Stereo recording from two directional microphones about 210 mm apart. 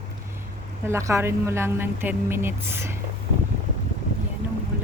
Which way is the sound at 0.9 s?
15° right (ahead or behind).